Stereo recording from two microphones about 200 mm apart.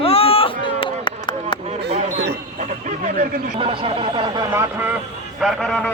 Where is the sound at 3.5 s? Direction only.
25° right (ahead or behind).